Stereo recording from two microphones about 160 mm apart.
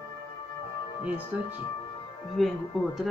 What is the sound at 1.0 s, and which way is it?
Speech, 10° right (ahead or behind).